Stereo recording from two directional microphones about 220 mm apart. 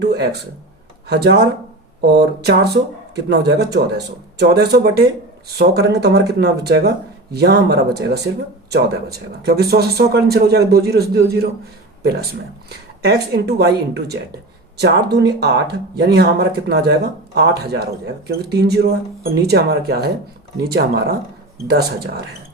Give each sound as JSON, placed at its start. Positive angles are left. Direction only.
{"t": 0.0, "sound": "speech", "side_deg": -50}